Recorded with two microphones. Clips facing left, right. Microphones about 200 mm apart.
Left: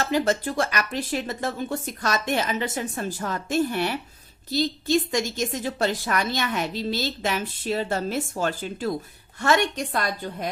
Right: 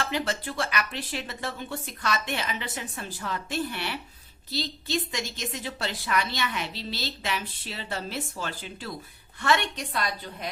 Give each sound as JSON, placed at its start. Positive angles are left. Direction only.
{"t": 0.0, "sound": "a woman's voice", "side_deg": 45}